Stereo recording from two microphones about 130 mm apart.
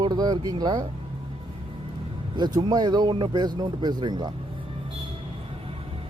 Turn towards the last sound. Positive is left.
turn(degrees=-35)  # may be behind; listen again after turning